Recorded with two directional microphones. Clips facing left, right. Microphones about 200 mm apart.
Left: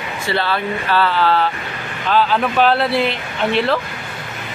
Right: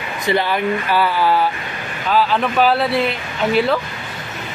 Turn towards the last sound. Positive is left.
turn(degrees=0)  # may be behind; listen again after turning